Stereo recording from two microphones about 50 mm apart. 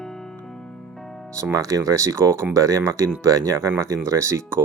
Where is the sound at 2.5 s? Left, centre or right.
Right.